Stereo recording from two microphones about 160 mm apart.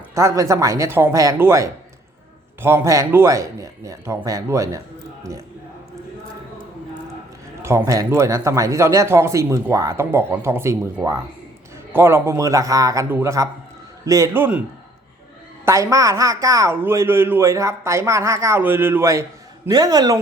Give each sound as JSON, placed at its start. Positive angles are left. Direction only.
{"t": 0.1, "sound": "speech", "side_deg": -20}
{"t": 7.6, "sound": "speech", "side_deg": -15}
{"t": 15.6, "sound": "speech", "side_deg": -20}